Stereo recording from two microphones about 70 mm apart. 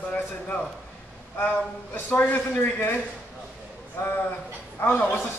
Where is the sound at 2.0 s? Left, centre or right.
Left.